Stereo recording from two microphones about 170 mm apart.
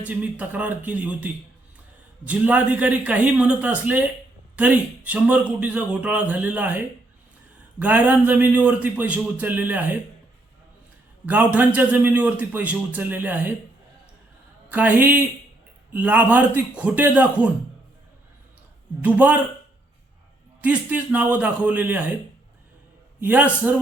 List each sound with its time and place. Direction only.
0.0 s a man's voice: 10° right (ahead or behind)
11.3 s a man's voice: 10° right (ahead or behind)
14.7 s a man's voice: 10° right (ahead or behind)
19.0 s a man's voice: 10° right (ahead or behind)
20.6 s a man's voice: 10° right (ahead or behind)
23.2 s a man's voice: 10° right (ahead or behind)